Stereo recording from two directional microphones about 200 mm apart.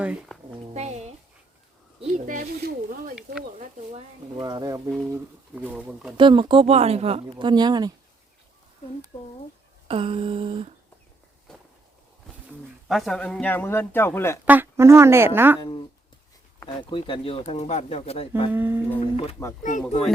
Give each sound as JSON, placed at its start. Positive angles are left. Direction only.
{"t": 0.0, "sound": "speech", "side_deg": -5}
{"t": 0.7, "sound": "a sound", "side_deg": -35}
{"t": 2.0, "sound": "speech", "side_deg": -35}
{"t": 4.4, "sound": "speech", "side_deg": -20}
{"t": 4.9, "sound": "speech", "side_deg": -10}
{"t": 6.1, "sound": "speech", "side_deg": -25}
{"t": 9.9, "sound": "speech", "side_deg": -30}
{"t": 11.5, "sound": "walk", "side_deg": 5}
{"t": 12.9, "sound": "a man's voice", "side_deg": 0}
{"t": 14.4, "sound": "speech", "side_deg": -10}
{"t": 16.6, "sound": "speech", "side_deg": 20}
{"t": 18.5, "sound": "speech", "side_deg": -10}
{"t": 18.9, "sound": "speech", "side_deg": 30}